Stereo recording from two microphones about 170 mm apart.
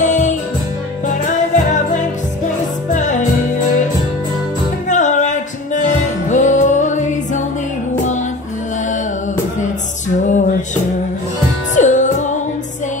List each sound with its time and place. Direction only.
0.0 s music: 45° left (ahead or behind)
4.8 s music: 45° left (ahead or behind)
10.2 s music: 45° left (ahead or behind)